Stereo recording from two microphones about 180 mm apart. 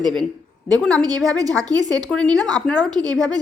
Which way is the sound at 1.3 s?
20° right (ahead or behind).